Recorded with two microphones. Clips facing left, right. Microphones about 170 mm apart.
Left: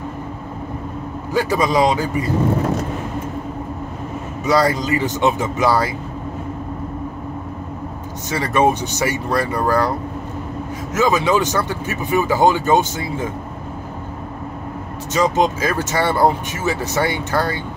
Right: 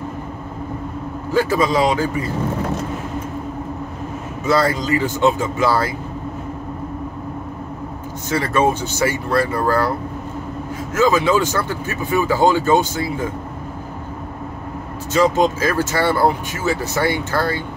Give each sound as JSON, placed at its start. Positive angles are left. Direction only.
{"t": 1.3, "sound": "speech", "side_deg": 15}
{"t": 4.5, "sound": "speech", "side_deg": 15}
{"t": 8.3, "sound": "speech", "side_deg": 15}
{"t": 11.0, "sound": "speech", "side_deg": 20}
{"t": 15.1, "sound": "speech", "side_deg": 15}